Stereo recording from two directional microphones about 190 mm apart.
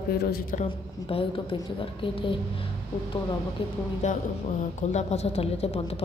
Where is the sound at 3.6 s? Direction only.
30° left (ahead or behind).